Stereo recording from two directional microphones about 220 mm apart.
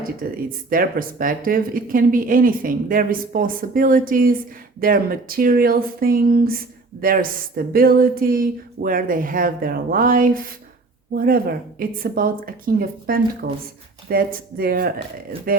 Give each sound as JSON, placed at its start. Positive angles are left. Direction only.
{"t": 0.2, "sound": "speech", "side_deg": -40}